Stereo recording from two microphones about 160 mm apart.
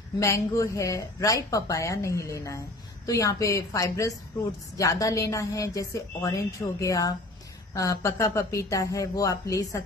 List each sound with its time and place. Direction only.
0.2 s a woman's voice: 20° left (ahead or behind)